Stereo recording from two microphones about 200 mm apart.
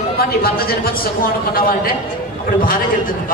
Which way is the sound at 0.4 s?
50° left (ahead or behind).